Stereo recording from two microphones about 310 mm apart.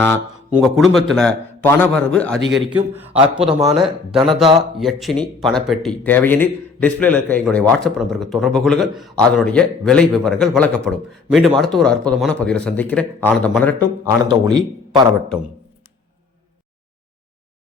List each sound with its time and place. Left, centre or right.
0.5 s a man's voice: centre
4.8 s a man's voice: centre
14.0 s a man's voice: centre